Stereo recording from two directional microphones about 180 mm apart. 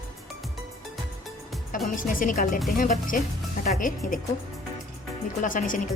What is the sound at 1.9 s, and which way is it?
Speech, 45° left (ahead or behind).